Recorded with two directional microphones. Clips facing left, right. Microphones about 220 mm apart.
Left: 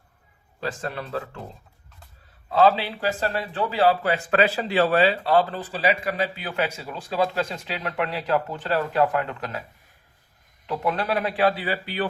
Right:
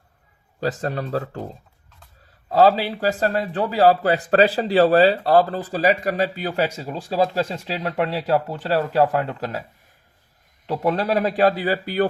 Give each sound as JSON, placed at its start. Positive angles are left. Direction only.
{"t": 0.6, "sound": "a man's voice", "side_deg": -40}
{"t": 2.5, "sound": "a man's voice", "side_deg": -40}
{"t": 10.7, "sound": "a man's voice", "side_deg": -35}